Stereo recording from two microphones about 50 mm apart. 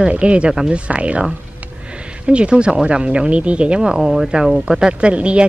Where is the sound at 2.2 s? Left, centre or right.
Right.